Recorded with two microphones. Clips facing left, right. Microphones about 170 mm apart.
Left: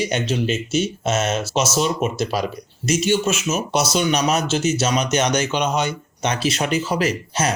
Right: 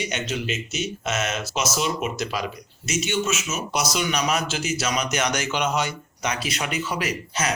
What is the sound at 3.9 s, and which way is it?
Speech, 25° left (ahead or behind).